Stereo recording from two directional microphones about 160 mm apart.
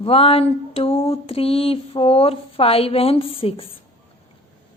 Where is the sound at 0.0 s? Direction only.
35° left (ahead or behind).